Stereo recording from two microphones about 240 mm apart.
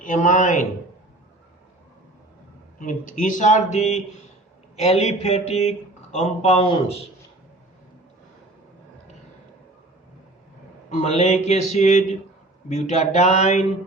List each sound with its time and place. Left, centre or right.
0.0 s speech: left
2.7 s speech: left
11.0 s speech: left